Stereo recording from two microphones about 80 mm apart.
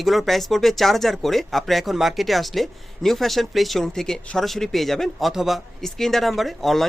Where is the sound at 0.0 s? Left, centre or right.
Centre.